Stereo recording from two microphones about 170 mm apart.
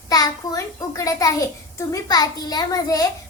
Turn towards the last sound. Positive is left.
turn(degrees=20)  # may be behind; listen again after turning